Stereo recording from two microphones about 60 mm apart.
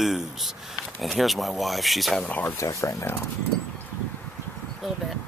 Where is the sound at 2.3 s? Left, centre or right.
Left.